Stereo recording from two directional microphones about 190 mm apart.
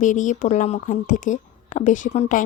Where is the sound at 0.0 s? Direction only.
40° left (ahead or behind).